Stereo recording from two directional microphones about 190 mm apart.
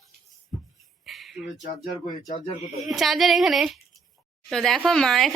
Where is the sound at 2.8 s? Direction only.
Centre (ahead or behind).